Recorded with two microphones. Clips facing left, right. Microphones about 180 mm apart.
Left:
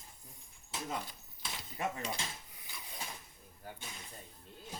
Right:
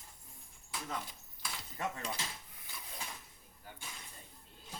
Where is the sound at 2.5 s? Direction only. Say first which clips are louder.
Even; centre (ahead or behind).